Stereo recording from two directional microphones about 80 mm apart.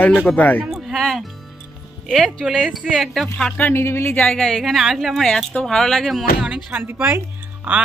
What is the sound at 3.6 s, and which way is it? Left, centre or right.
Speech, left.